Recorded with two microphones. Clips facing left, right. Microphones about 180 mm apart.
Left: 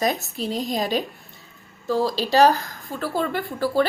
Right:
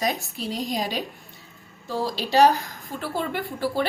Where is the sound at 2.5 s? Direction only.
15° right (ahead or behind).